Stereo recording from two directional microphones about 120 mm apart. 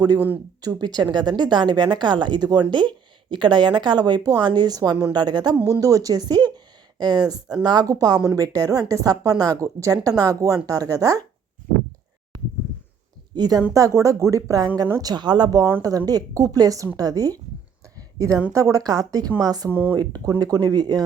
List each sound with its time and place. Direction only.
0.6 s speech: 35° right (ahead or behind)
5.5 s speech: 20° right (ahead or behind)
5.8 s speech: 30° right (ahead or behind)
13.3 s a woman's voice: 35° right (ahead or behind)
17.9 s a sound: 30° right (ahead or behind)
18.5 s speech: 25° right (ahead or behind)
19.7 s speech: 15° right (ahead or behind)
20.0 s speech: 35° right (ahead or behind)